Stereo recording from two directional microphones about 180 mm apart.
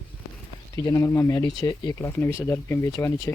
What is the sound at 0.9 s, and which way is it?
Speech, 20° left (ahead or behind).